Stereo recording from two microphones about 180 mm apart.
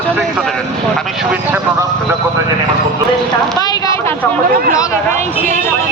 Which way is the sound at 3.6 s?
20° left (ahead or behind).